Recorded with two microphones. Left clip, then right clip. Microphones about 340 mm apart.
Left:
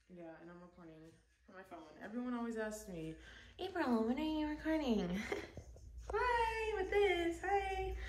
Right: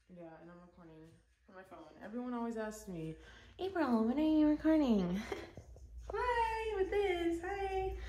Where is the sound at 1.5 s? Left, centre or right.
Centre.